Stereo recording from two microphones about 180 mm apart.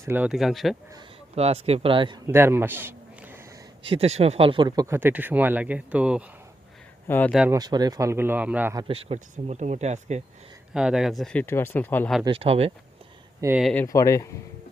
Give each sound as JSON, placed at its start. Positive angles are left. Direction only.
{"t": 0.0, "sound": "speech", "side_deg": -10}
{"t": 1.4, "sound": "a man's voice", "side_deg": -35}
{"t": 3.8, "sound": "speech", "side_deg": -35}
{"t": 7.1, "sound": "speech", "side_deg": 10}
{"t": 7.5, "sound": "speech", "side_deg": -20}
{"t": 8.9, "sound": "speech", "side_deg": -35}
{"t": 10.8, "sound": "speech", "side_deg": -5}
{"t": 12.2, "sound": "speech", "side_deg": -30}
{"t": 13.6, "sound": "speech", "side_deg": 0}
{"t": 13.8, "sound": "speech", "side_deg": 15}